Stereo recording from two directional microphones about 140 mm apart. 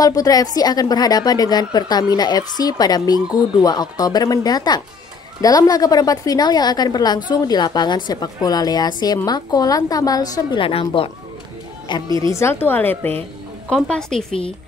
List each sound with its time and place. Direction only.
0.0 s a woman's voice: 25° left (ahead or behind)
10.6 s a woman's voice: 40° left (ahead or behind)
12.2 s a woman's voice: 20° left (ahead or behind); by 14.2 s 5° left (ahead or behind)